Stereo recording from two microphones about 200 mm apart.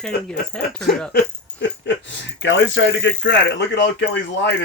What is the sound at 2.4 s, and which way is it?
Speech, 65° left (ahead or behind).